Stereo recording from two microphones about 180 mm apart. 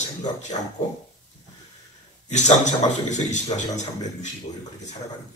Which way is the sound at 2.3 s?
40° left (ahead or behind).